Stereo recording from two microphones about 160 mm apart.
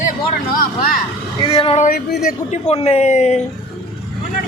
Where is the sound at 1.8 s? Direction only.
70° left (ahead or behind).